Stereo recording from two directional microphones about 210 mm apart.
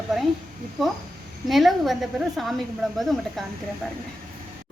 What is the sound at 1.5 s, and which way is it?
A woman's voice, centre (ahead or behind).